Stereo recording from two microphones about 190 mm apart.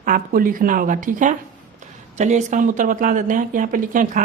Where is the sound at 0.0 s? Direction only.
45° right (ahead or behind).